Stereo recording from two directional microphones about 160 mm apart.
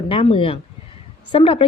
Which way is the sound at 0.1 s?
35° left (ahead or behind).